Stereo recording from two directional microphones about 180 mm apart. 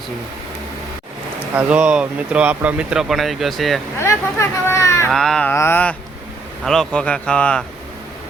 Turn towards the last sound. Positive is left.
turn(degrees=5)  # may be behind; listen again after turning